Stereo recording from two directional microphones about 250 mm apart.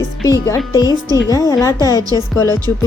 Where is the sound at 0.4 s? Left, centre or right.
Centre.